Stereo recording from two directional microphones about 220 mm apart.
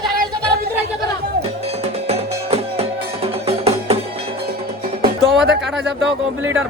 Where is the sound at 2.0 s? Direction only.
25° right (ahead or behind).